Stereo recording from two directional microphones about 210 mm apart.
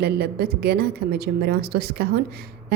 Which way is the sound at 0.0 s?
50° right (ahead or behind).